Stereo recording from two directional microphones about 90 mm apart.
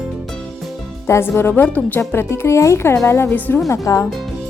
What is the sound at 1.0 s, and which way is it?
Speech, 25° left (ahead or behind).